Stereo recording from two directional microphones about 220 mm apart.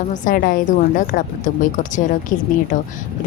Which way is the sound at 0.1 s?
40° left (ahead or behind).